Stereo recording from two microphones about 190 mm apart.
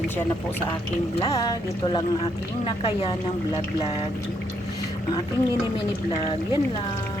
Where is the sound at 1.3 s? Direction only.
20° left (ahead or behind).